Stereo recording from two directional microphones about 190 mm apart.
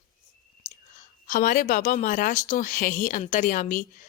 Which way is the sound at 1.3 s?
45° left (ahead or behind).